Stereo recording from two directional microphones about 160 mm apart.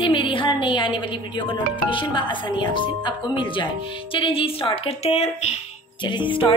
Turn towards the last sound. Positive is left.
turn(degrees=30)  # may be behind; listen again after turning